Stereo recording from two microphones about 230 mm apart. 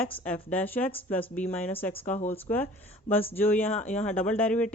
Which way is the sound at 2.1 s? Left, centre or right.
Left.